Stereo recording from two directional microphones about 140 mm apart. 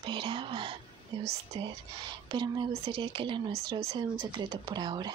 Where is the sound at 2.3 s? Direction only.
30° right (ahead or behind).